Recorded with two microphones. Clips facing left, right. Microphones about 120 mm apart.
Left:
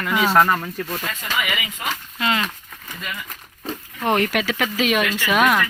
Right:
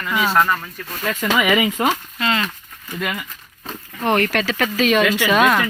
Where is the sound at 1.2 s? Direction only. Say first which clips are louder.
Right 13 dB; 90° right.